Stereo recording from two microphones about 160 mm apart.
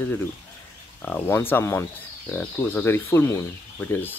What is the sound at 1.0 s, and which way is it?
Speech, 10° left (ahead or behind).